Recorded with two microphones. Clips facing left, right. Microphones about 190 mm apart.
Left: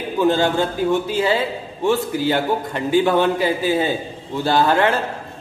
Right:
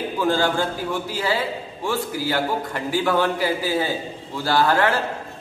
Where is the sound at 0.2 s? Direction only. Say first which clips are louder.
Left 4 dB; 20° left (ahead or behind).